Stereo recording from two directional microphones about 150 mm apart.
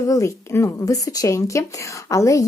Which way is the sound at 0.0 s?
20° left (ahead or behind).